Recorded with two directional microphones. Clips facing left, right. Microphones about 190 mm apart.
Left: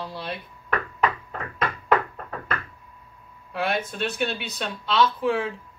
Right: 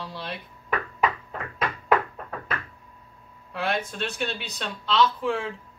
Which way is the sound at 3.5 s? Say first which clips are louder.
Left 2 dB; centre (ahead or behind).